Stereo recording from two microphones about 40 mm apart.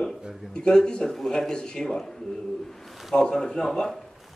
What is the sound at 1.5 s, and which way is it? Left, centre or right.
Speech, centre.